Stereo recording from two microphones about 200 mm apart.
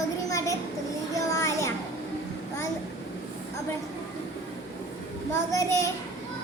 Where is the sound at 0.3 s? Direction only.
15° left (ahead or behind).